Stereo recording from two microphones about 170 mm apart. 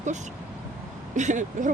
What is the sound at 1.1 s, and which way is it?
Speech, 45° right (ahead or behind).